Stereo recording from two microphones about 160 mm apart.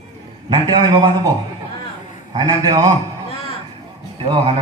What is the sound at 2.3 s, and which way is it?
Speech, 25° right (ahead or behind).